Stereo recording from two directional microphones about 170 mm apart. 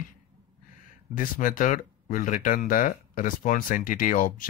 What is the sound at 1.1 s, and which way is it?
Speech, 50° left (ahead or behind).